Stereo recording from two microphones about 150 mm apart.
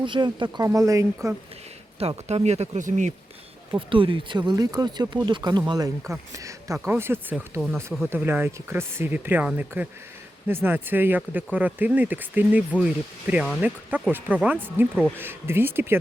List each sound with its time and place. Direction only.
0.0 s speech: 30° right (ahead or behind)
2.0 s speech: 45° right (ahead or behind)
3.7 s speech: 35° right (ahead or behind); by 7.6 s 15° right (ahead or behind)
7.6 s speech: centre (ahead or behind)
8.1 s speech: 15° right (ahead or behind)